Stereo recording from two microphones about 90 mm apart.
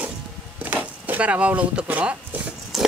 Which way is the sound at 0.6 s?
15° right (ahead or behind).